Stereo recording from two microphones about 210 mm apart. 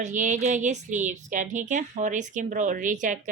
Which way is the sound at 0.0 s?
35° right (ahead or behind).